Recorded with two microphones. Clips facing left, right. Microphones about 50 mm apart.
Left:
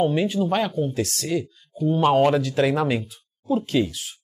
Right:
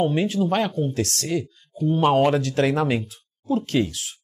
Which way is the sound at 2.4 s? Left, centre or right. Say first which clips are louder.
Even; right.